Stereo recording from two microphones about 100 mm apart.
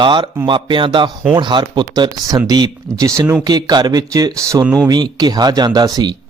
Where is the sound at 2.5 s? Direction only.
35° right (ahead or behind).